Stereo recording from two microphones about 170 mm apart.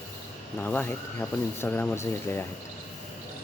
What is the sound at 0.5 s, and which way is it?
Speech, 10° left (ahead or behind).